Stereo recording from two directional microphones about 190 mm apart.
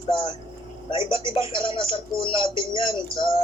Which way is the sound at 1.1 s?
30° left (ahead or behind).